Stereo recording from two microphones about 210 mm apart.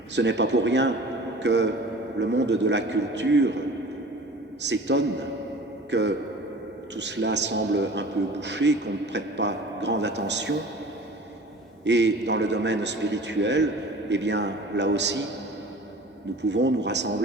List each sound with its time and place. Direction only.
0.2 s a man's voice: 55° right (ahead or behind)
4.6 s a man's voice: 55° right (ahead or behind)
11.9 s a man's voice: 55° right (ahead or behind)
16.3 s a man's voice: 55° right (ahead or behind)